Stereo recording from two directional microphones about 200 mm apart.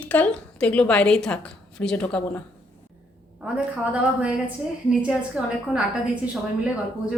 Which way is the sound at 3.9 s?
5° right (ahead or behind).